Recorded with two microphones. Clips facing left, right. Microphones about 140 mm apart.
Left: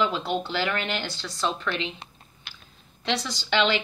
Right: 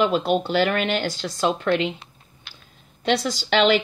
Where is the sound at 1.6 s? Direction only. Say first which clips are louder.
Right 9 dB; 65° right (ahead or behind).